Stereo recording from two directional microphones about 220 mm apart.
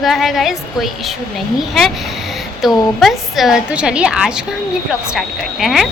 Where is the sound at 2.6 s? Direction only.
Centre (ahead or behind).